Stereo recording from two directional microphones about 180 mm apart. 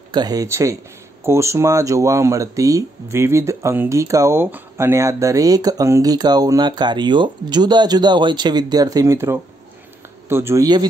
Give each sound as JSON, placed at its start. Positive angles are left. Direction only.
{"t": 0.1, "sound": "speech", "side_deg": -20}